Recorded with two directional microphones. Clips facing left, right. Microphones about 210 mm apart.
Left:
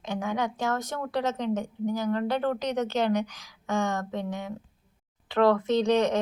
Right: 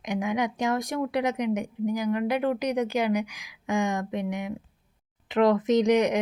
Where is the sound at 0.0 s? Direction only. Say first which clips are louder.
Right 2 dB; 15° right (ahead or behind).